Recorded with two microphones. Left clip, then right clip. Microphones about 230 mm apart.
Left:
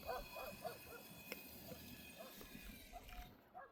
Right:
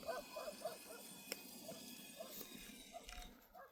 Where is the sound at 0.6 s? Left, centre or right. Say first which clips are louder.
Right 2 dB; left.